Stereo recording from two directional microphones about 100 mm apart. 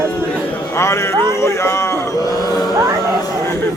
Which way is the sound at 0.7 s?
25° left (ahead or behind).